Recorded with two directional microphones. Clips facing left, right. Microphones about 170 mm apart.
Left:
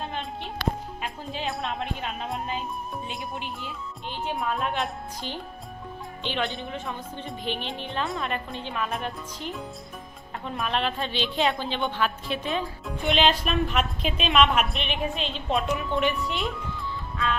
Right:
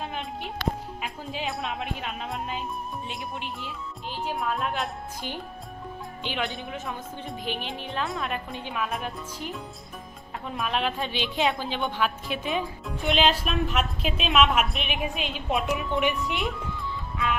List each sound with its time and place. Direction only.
0.0 s music: 5° right (ahead or behind)
1.0 s speech: 5° right (ahead or behind)
6.2 s speech: 5° right (ahead or behind)
16.2 s a woman's voice: 20° right (ahead or behind)